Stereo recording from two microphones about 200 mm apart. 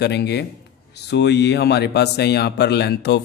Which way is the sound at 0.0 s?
55° left (ahead or behind).